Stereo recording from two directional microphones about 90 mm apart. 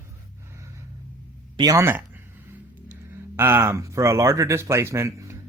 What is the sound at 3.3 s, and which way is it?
Speech, 25° right (ahead or behind).